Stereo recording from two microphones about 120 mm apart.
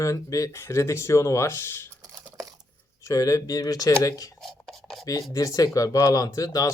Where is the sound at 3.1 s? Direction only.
25° left (ahead or behind).